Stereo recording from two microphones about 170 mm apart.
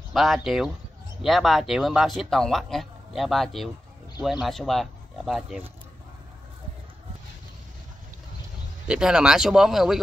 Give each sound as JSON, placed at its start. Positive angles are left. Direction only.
{"t": 0.1, "sound": "speech", "side_deg": 0}
{"t": 8.8, "sound": "speech", "side_deg": -5}